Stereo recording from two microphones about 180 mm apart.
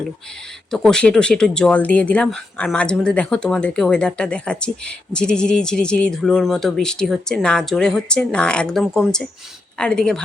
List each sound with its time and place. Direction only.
0.7 s speech: 5° left (ahead or behind)